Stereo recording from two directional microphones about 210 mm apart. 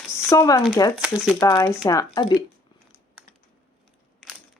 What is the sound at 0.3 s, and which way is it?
Speech, 15° left (ahead or behind).